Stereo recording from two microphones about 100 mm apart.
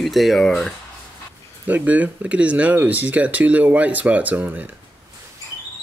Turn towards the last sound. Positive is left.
turn(degrees=-15)  # may be behind; listen again after turning